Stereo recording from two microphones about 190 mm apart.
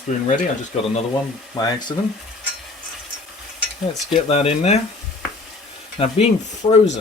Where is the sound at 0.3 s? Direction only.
45° left (ahead or behind).